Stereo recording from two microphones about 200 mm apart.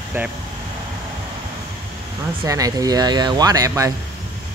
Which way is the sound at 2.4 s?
15° right (ahead or behind).